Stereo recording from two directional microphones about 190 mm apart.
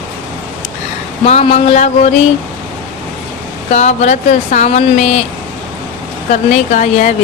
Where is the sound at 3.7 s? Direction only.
35° left (ahead or behind).